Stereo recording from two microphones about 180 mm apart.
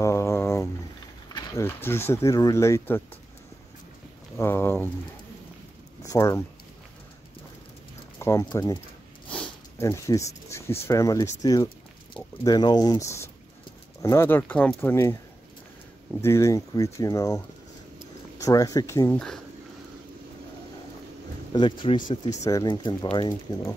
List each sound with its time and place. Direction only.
0.0 s a sound: 15° left (ahead or behind)
1.3 s speech: 15° left (ahead or behind)
4.4 s speech: 15° left (ahead or behind)
6.0 s speech: 15° left (ahead or behind)
8.2 s speech: 15° left (ahead or behind)
16.2 s speech: 15° left (ahead or behind)
18.4 s speech: 20° left (ahead or behind)
19.1 s speech: 5° left (ahead or behind)
21.5 s speech: 25° left (ahead or behind)